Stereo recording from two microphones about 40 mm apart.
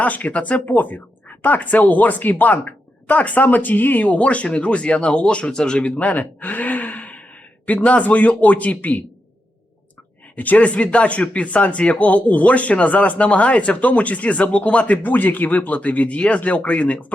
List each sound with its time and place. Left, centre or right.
0.0 s speech: left
4.0 s speech: left
6.0 s gasp: left
7.7 s speech: left
10.3 s speech: left
15.0 s speech: left